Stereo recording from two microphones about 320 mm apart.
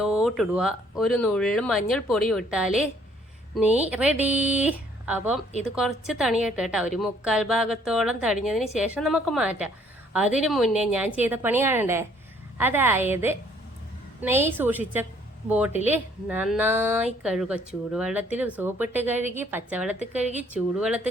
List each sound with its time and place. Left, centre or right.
0.0 s a woman's voice: centre
20.0 s a woman's voice: right
20.5 s speech: centre